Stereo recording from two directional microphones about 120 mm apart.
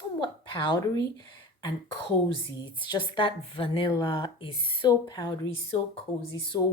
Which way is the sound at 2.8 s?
40° left (ahead or behind).